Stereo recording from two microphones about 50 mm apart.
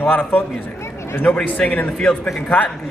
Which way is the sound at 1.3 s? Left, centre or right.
Left.